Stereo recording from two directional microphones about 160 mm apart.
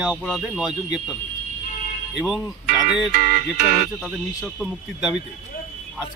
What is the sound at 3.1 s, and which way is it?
Music, 55° right (ahead or behind).